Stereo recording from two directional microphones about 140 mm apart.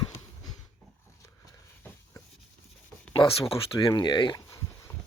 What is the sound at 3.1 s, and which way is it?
Speech, 35° left (ahead or behind).